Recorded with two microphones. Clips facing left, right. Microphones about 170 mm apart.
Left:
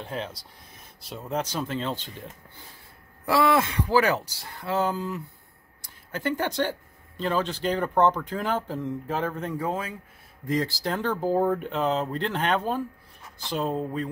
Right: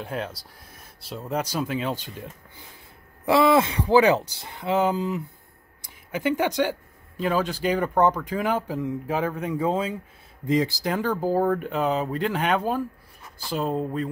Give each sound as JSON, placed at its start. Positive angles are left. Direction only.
{"t": 0.0, "sound": "speech", "side_deg": -5}
{"t": 3.3, "sound": "speech", "side_deg": -20}
{"t": 9.7, "sound": "speech", "side_deg": -25}